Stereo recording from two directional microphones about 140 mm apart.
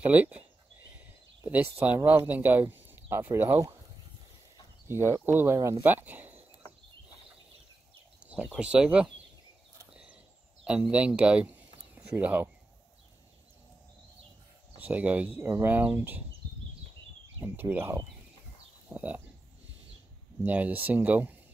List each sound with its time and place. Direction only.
0.0 s speech: 10° right (ahead or behind)
0.9 s a sound: 10° right (ahead or behind)
2.0 s speech: 10° right (ahead or behind)
5.2 s speech: 15° right (ahead or behind)
8.5 s speech: 5° right (ahead or behind)
9.8 s a sound: 5° right (ahead or behind)
10.6 s speech: 10° right (ahead or behind)
14.8 s speech: 10° right (ahead or behind)
17.6 s speech: 15° right (ahead or behind)
20.4 s speech: 10° right (ahead or behind)